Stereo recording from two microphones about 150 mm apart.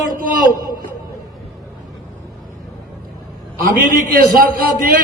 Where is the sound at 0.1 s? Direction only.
65° right (ahead or behind).